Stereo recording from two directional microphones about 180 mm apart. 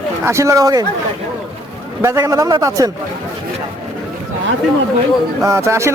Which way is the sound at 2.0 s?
15° right (ahead or behind).